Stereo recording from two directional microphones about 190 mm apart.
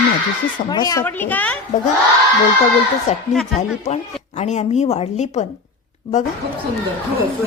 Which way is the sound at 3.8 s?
35° left (ahead or behind).